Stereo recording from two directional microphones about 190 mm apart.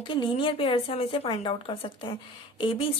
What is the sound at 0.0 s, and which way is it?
A woman's voice, 25° left (ahead or behind).